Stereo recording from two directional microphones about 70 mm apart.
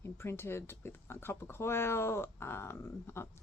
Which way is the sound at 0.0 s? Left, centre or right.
Left.